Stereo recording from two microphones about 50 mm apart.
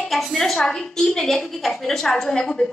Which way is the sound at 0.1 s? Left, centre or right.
Centre.